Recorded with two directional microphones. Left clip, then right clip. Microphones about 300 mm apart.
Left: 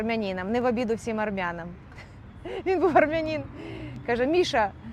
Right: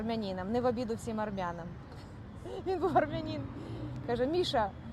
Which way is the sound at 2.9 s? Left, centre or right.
Left.